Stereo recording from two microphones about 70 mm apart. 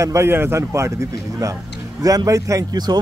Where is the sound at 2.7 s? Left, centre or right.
Right.